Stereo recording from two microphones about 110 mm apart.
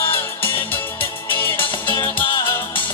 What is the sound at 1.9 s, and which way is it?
Music, 40° left (ahead or behind).